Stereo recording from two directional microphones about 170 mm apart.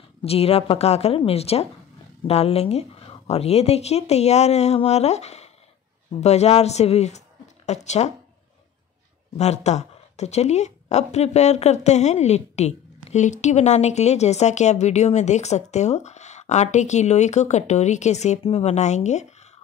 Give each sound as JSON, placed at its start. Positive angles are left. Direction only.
{"t": 0.2, "sound": "a woman's voice", "side_deg": 35}
{"t": 9.4, "sound": "a woman's voice", "side_deg": 40}